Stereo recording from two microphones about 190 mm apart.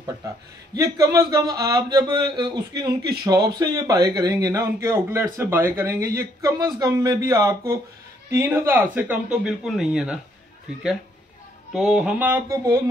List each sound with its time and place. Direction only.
0.7 s speech: 15° right (ahead or behind)
11.7 s speech: 5° right (ahead or behind)